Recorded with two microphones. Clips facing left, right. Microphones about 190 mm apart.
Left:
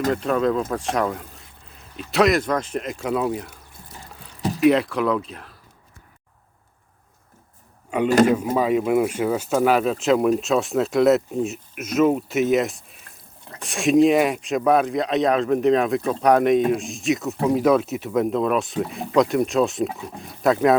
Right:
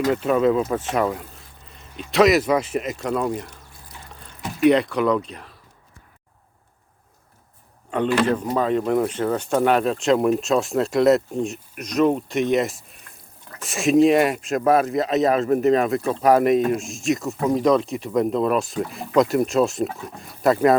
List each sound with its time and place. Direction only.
0.1 s speech: 5° right (ahead or behind)
4.4 s a sound: 35° left (ahead or behind)
4.6 s speech: centre (ahead or behind)
7.9 s a man's voice: 10° left (ahead or behind)